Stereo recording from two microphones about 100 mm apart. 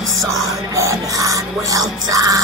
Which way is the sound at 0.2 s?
30° right (ahead or behind).